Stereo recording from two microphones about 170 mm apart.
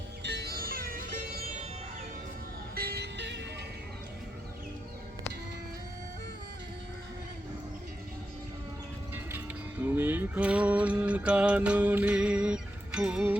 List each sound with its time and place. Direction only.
0.2 s music: 75° right (ahead or behind); by 1.6 s 50° right (ahead or behind)
2.7 s music: 65° right (ahead or behind); by 3.4 s 90° right
9.8 s music: 10° right (ahead or behind)